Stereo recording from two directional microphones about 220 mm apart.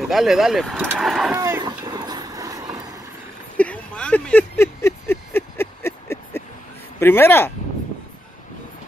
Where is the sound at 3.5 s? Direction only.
5° left (ahead or behind).